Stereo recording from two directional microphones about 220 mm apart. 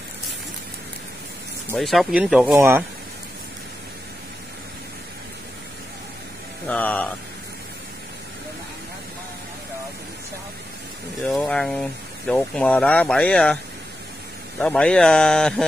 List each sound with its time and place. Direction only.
1.7 s speech: centre (ahead or behind)
6.7 s speech: 5° left (ahead or behind)
11.2 s speech: 5° left (ahead or behind)
14.6 s speech: 5° left (ahead or behind)